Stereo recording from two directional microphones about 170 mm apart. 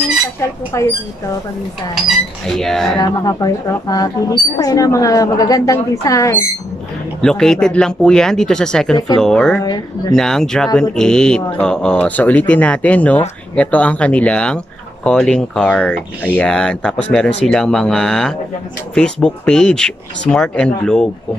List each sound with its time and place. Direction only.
0.7 s speech: 15° left (ahead or behind)
2.4 s speech: centre (ahead or behind)
3.0 s speech: 20° left (ahead or behind)
7.2 s speech: 5° left (ahead or behind)
9.6 s speech: 25° left (ahead or behind)
10.1 s speech: 5° left (ahead or behind)